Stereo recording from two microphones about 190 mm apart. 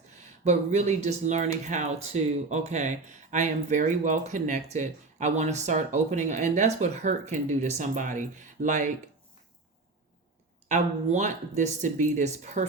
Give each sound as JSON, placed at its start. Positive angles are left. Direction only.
{"t": 0.4, "sound": "speech", "side_deg": -35}
{"t": 10.7, "sound": "speech", "side_deg": -40}